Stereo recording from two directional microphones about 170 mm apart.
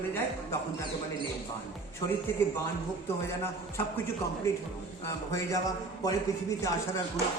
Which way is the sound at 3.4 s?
15° left (ahead or behind).